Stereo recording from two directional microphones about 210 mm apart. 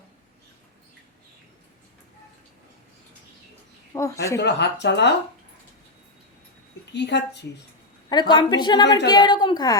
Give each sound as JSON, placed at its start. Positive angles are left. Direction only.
{"t": 3.9, "sound": "speech", "side_deg": 15}
{"t": 4.4, "sound": "speech", "side_deg": 55}
{"t": 6.9, "sound": "speech", "side_deg": 55}
{"t": 8.1, "sound": "a woman's voice", "side_deg": 20}